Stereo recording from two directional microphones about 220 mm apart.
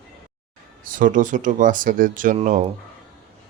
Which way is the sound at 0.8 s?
40° right (ahead or behind).